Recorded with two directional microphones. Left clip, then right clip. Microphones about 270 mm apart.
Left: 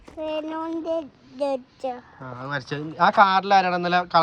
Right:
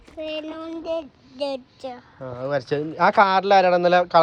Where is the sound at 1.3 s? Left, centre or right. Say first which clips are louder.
Left 2 dB; left.